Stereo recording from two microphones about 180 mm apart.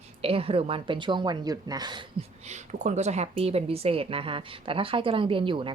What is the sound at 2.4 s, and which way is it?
A woman's voice, 40° right (ahead or behind).